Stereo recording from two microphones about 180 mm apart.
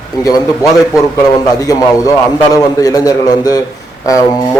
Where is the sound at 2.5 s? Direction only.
20° left (ahead or behind).